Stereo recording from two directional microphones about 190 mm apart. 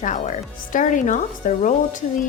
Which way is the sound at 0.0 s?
40° left (ahead or behind).